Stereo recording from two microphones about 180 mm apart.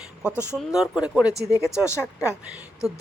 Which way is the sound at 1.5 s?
15° left (ahead or behind).